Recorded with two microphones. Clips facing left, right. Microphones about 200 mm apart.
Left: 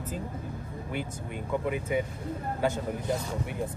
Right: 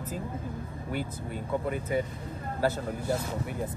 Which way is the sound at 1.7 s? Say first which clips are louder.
Even; 10° left (ahead or behind).